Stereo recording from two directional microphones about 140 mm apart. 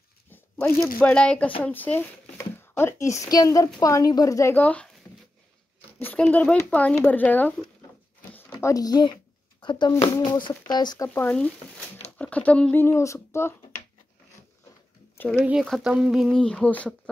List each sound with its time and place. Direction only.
0.9 s speech: 10° left (ahead or behind)
4.6 s speech: 10° left (ahead or behind)
5.9 s a sound: 15° left (ahead or behind)
6.2 s speech: 10° left (ahead or behind); by 11.1 s 30° left (ahead or behind)
11.1 s speech: 10° left (ahead or behind)
15.1 s speech: 10° left (ahead or behind)
15.6 s speech: centre (ahead or behind)